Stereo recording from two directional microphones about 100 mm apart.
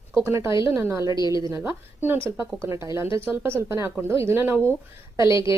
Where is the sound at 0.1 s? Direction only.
30° right (ahead or behind).